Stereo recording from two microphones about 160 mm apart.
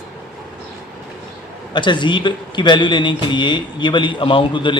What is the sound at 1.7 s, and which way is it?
A man's voice, 30° left (ahead or behind).